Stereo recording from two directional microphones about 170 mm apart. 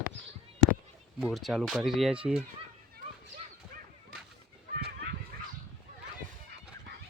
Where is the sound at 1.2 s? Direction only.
Centre (ahead or behind).